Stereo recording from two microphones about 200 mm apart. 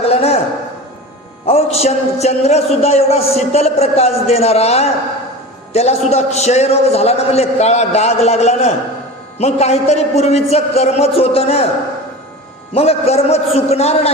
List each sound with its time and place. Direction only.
0.1 s a sound: 30° left (ahead or behind)
1.5 s a man's voice: 30° left (ahead or behind)
12.7 s a man's voice: 30° left (ahead or behind)